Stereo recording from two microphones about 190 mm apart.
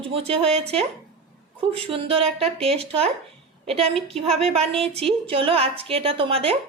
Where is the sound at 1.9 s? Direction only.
30° right (ahead or behind).